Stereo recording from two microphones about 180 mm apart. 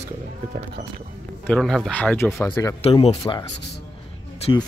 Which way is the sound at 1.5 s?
Centre (ahead or behind).